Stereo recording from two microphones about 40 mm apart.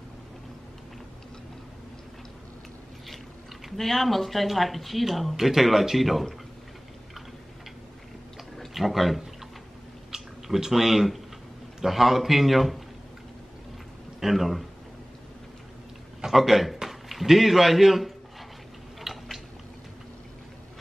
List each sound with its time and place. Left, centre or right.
3.7 s speech: centre
8.7 s speech: centre
14.2 s speech: centre
16.3 s a man's voice: centre
19.1 s biting: centre